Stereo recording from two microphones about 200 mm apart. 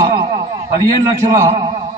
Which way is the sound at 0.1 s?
25° right (ahead or behind).